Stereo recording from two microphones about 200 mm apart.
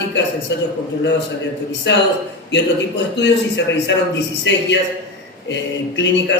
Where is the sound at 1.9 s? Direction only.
60° left (ahead or behind).